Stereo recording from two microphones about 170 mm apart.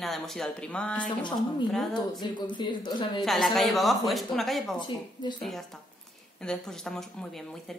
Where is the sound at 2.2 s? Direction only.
25° left (ahead or behind).